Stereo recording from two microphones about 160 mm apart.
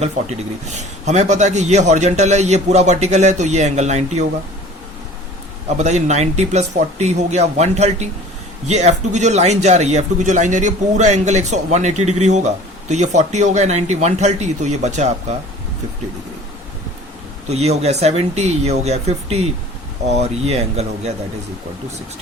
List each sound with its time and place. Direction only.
0.0 s a man's voice: 45° right (ahead or behind)
5.7 s a man's voice: 45° right (ahead or behind)
17.5 s a man's voice: 45° right (ahead or behind)